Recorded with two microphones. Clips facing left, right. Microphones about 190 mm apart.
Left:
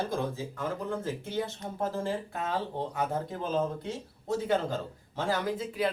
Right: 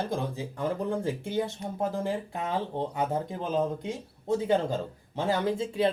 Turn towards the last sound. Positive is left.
turn(degrees=-25)  # may be behind; listen again after turning